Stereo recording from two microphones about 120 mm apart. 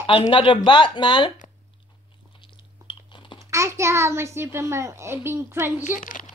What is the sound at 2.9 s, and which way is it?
Chewing, 40° left (ahead or behind).